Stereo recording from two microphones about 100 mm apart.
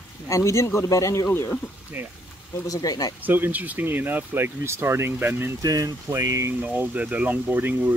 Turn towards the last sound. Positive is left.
turn(degrees=-20)  # may be behind; listen again after turning